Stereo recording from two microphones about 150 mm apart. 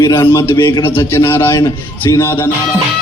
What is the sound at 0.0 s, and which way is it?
A man's voice, 20° left (ahead or behind).